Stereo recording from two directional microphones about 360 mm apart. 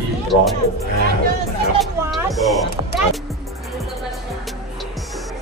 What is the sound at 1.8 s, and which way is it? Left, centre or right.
Speech, centre.